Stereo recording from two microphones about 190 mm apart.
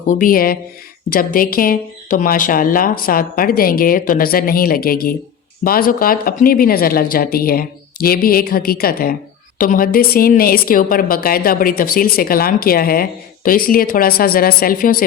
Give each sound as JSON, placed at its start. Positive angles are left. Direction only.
{"t": 0.0, "sound": "a woman's voice", "side_deg": 45}